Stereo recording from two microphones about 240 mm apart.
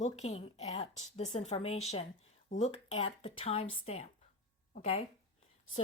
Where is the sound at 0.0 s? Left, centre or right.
Left.